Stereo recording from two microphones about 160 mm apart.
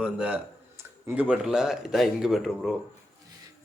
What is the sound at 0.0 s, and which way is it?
Speech, 5° right (ahead or behind).